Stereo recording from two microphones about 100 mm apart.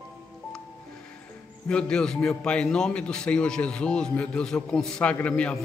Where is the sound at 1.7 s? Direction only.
10° left (ahead or behind).